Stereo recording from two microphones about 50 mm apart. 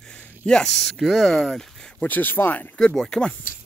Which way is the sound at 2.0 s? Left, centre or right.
Left.